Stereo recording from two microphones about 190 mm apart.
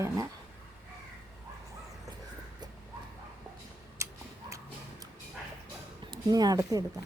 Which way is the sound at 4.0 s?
15° right (ahead or behind).